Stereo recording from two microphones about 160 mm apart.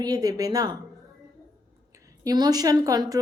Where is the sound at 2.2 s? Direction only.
25° right (ahead or behind).